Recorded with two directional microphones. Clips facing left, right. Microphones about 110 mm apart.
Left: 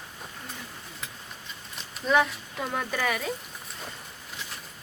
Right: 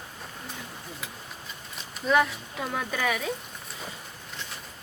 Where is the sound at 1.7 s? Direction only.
Centre (ahead or behind).